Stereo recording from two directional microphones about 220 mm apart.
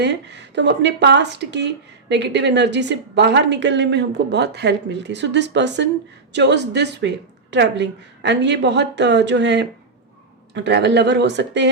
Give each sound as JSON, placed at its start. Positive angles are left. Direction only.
{"t": 0.0, "sound": "speech", "side_deg": -50}